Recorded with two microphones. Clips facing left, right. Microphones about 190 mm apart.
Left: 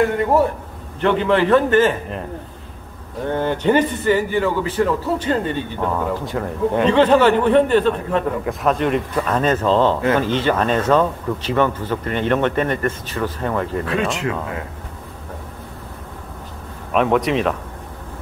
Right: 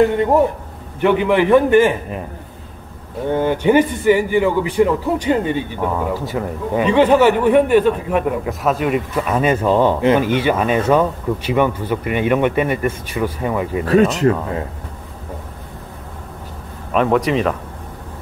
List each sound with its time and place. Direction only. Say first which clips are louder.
0.2 s speech: right 2 dB; 15° right (ahead or behind)
3.3 s speech: right 3 dB; 10° right (ahead or behind)
14.2 s speech: right 8 dB; 40° right (ahead or behind)
16.9 s speech: right 1 dB; centre (ahead or behind)